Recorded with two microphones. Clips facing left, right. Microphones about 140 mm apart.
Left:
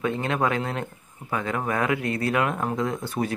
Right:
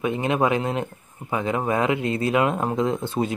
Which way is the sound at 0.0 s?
20° right (ahead or behind).